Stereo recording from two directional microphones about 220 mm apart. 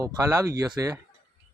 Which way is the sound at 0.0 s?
15° right (ahead or behind).